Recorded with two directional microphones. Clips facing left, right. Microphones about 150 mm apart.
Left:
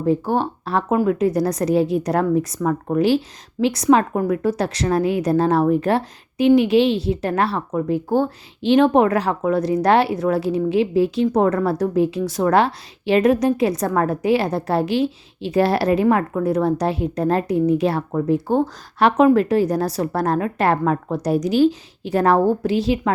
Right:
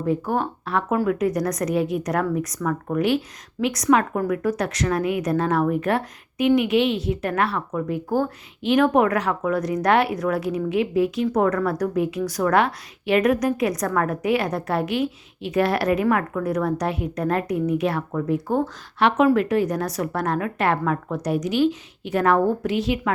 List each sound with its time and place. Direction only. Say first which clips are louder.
0.0 s a woman's voice: left 4 dB; 30° left (ahead or behind)